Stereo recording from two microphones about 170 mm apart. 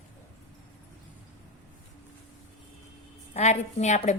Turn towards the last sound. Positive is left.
turn(degrees=40)  # may be behind; listen again after turning